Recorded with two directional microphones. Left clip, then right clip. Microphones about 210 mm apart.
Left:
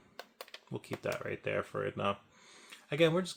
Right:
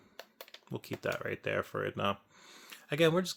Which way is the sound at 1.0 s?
30° right (ahead or behind).